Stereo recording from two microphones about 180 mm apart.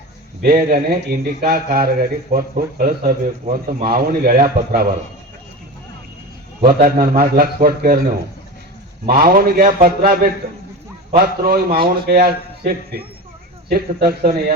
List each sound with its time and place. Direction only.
0.4 s a man's voice: 60° right (ahead or behind)
6.6 s a man's voice: 55° right (ahead or behind)
9.0 s a man's voice: 55° right (ahead or behind)